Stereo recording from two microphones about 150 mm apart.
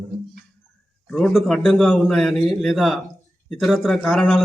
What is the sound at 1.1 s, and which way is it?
A man's voice, centre (ahead or behind).